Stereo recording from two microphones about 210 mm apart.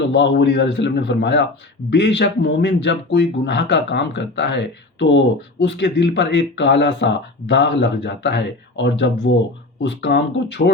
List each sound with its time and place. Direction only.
0.1 s speech: 55° left (ahead or behind)